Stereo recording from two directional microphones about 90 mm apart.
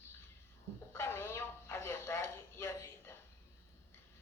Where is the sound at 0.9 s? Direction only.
25° left (ahead or behind).